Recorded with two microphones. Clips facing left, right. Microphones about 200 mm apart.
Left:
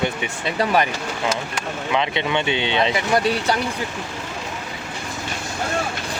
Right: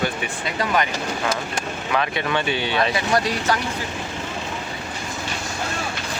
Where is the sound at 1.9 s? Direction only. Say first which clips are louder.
Left 1 dB; 20° left (ahead or behind).